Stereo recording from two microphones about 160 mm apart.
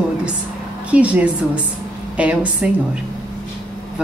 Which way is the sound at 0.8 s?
10° right (ahead or behind).